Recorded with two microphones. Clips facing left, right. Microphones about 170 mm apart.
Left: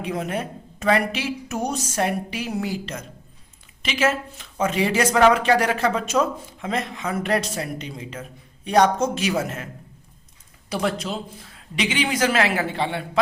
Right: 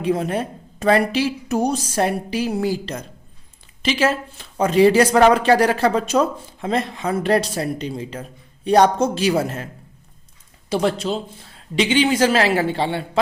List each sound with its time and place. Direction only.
0.0 s speech: 35° right (ahead or behind)
10.7 s a man's voice: 30° right (ahead or behind)